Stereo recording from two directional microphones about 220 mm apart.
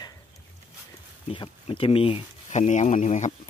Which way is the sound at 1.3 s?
25° left (ahead or behind).